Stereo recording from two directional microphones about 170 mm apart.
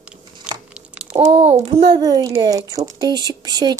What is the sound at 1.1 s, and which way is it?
Speech, 35° right (ahead or behind).